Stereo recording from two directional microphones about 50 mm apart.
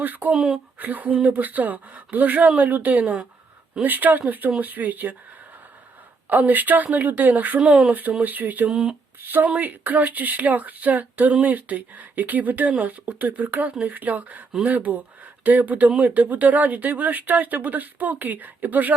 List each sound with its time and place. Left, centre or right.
0.0 s speech: right
3.0 s speech: centre
3.8 s speech: right
6.2 s speech: right
7.6 s speech: centre
8.2 s speech: right